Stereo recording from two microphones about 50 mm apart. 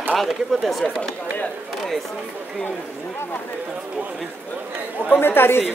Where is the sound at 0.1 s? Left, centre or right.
Centre.